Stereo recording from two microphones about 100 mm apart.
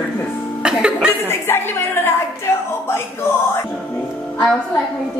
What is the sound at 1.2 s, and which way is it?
A woman's voice, 25° left (ahead or behind).